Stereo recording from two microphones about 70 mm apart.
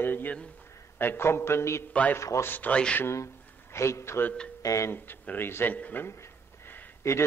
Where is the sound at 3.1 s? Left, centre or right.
Left.